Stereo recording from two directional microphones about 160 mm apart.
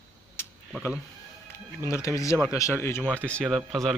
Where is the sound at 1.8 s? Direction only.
20° left (ahead or behind).